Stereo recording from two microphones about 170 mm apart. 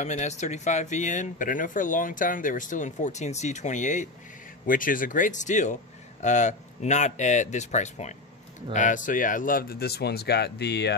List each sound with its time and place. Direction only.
0.0 s speech: 40° left (ahead or behind); by 11.0 s 75° left (ahead or behind)